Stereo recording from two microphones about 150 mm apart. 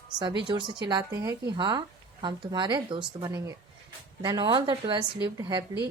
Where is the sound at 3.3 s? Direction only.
20° right (ahead or behind).